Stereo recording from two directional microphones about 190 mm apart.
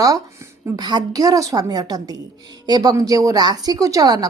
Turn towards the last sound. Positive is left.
turn(degrees=-20)  # may be behind; listen again after turning